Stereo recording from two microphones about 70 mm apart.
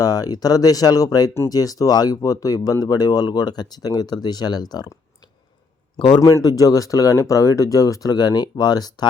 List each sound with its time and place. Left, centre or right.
0.0 s speech: left
6.0 s a man's voice: left
6.2 s speech: left